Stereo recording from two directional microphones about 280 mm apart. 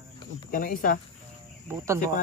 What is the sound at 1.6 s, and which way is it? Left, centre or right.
Speech, centre.